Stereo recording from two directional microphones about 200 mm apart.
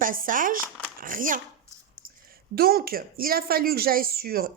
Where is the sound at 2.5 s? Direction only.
50° right (ahead or behind).